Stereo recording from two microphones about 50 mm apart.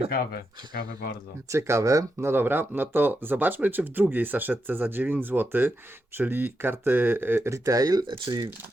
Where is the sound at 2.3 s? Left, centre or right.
Right.